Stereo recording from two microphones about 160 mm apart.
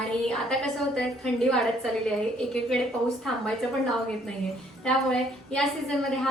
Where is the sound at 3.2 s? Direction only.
Centre (ahead or behind).